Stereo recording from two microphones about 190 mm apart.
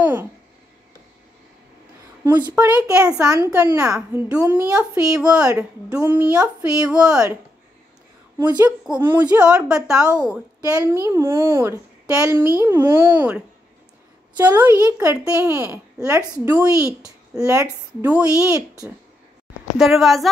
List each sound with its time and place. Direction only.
0.0 s a sound: 10° right (ahead or behind)
2.2 s a woman's voice: 10° right (ahead or behind)
8.4 s a child's voice: 10° right (ahead or behind)
10.8 s a child's voice: 15° right (ahead or behind)
14.5 s a child's voice: 15° right (ahead or behind)
19.8 s a woman's voice: centre (ahead or behind)